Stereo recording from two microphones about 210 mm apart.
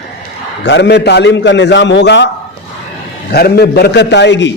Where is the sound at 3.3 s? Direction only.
50° left (ahead or behind).